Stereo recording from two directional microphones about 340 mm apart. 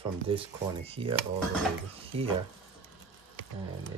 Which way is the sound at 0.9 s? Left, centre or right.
Centre.